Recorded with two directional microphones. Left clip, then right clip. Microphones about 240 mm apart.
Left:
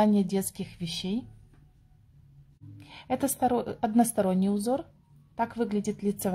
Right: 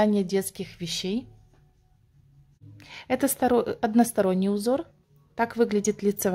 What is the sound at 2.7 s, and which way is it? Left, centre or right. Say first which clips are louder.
A woman's voice: right 4 dB; centre.